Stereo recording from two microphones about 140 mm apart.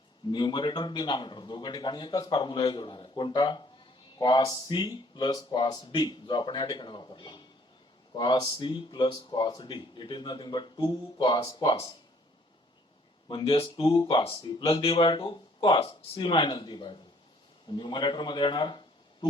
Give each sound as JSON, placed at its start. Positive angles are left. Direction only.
{"t": 0.3, "sound": "speech", "side_deg": 35}
{"t": 13.2, "sound": "speech", "side_deg": 35}